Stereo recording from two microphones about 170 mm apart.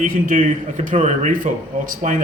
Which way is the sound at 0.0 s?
55° right (ahead or behind).